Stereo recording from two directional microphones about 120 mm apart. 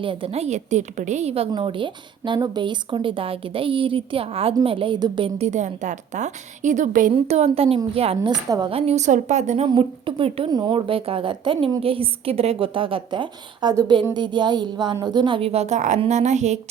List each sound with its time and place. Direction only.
0.0 s a woman's voice: 45° right (ahead or behind)
1.5 s speech: 45° right (ahead or behind)
5.4 s a woman's voice: 75° right (ahead or behind); by 8.3 s 55° right (ahead or behind)
8.3 s speech: 35° right (ahead or behind)
8.7 s a woman's voice: 65° right (ahead or behind)
9.6 s speech: 45° right (ahead or behind)
10.5 s a woman's voice: 40° right (ahead or behind); by 16.6 s 75° right (ahead or behind)